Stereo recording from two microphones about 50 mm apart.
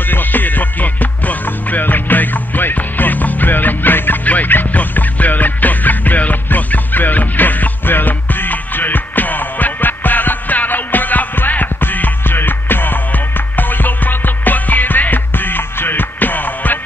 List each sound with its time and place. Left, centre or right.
0.1 s music: left